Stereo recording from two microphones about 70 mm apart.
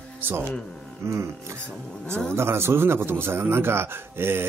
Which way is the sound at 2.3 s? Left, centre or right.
Right.